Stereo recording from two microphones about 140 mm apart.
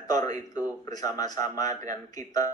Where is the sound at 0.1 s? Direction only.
25° left (ahead or behind).